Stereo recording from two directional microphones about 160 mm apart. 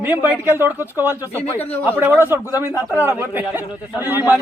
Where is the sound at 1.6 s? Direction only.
10° left (ahead or behind).